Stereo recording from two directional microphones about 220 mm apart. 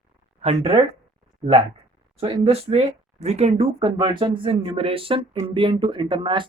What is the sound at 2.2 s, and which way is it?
Speech, 25° right (ahead or behind).